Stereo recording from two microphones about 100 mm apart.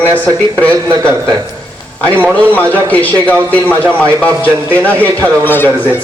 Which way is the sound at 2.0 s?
20° right (ahead or behind).